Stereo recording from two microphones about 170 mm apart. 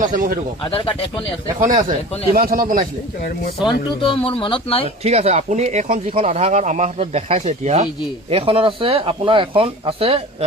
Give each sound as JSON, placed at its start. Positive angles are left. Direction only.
{"t": 0.0, "sound": "speech", "side_deg": -55}
{"t": 0.6, "sound": "speech", "side_deg": 35}
{"t": 1.5, "sound": "speech", "side_deg": -45}
{"t": 4.0, "sound": "speech", "side_deg": 30}
{"t": 5.0, "sound": "speech", "side_deg": -40}